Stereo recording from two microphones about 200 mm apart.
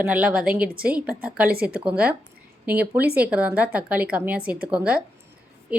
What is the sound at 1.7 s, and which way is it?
A woman's voice, 5° right (ahead or behind).